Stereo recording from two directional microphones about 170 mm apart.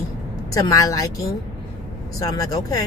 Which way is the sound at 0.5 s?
20° left (ahead or behind).